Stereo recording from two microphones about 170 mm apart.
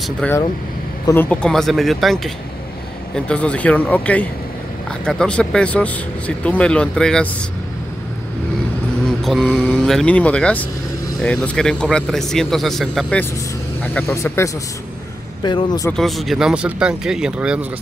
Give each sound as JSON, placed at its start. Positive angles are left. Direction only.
{"t": 0.2, "sound": "speech", "side_deg": 5}
{"t": 9.0, "sound": "speech", "side_deg": 0}
{"t": 13.9, "sound": "speech", "side_deg": 15}
{"t": 16.0, "sound": "speech", "side_deg": 0}